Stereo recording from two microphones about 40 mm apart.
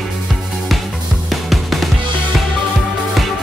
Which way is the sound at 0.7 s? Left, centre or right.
Centre.